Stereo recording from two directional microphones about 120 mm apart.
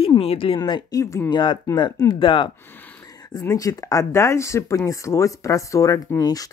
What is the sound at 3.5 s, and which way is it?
Speech, 30° left (ahead or behind).